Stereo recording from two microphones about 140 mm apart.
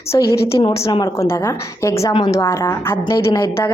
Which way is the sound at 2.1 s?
30° left (ahead or behind).